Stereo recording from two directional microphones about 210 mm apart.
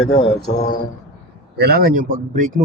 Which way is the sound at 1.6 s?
50° right (ahead or behind).